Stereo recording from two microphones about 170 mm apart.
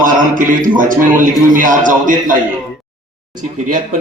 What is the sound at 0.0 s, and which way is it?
Speech, 50° right (ahead or behind).